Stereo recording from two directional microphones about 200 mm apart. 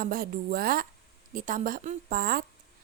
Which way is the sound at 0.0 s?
45° right (ahead or behind).